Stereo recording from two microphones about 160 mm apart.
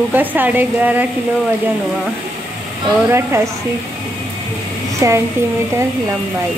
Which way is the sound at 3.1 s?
15° right (ahead or behind).